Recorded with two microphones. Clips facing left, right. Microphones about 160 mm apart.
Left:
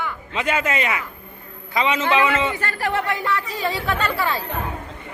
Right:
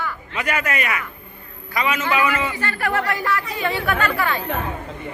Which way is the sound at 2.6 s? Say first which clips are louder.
Right 1 dB; 40° left (ahead or behind).